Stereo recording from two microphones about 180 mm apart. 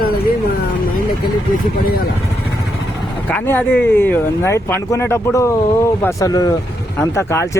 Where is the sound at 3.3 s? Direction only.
10° left (ahead or behind).